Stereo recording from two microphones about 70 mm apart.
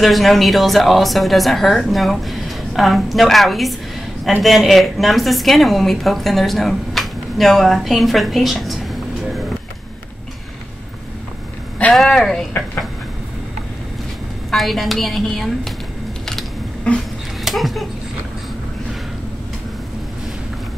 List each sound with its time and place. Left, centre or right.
0.0 s a woman's voice: centre
11.9 s a woman's voice: centre
14.5 s a woman's voice: centre
16.9 s a sound: centre
17.5 s speech: centre